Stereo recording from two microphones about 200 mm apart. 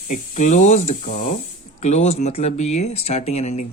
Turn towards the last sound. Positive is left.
turn(degrees=35)  # may be behind; listen again after turning